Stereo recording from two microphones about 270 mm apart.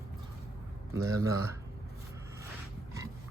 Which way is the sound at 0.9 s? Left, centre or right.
Centre.